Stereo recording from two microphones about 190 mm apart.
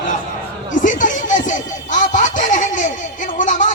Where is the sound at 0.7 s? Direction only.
40° left (ahead or behind).